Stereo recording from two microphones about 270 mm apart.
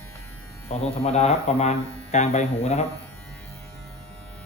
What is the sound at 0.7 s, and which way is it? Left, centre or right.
Speech, left.